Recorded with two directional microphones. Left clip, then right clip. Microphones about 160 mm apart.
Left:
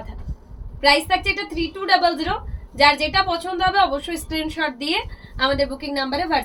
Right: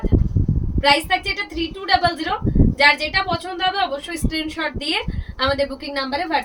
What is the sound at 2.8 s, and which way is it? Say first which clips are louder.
A woman's voice: left 1 dB; 20° right (ahead or behind).